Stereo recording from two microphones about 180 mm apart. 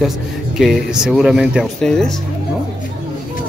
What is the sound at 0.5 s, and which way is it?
Speech, centre (ahead or behind).